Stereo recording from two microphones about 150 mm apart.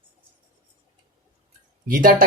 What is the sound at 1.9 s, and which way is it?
Speech, 65° right (ahead or behind).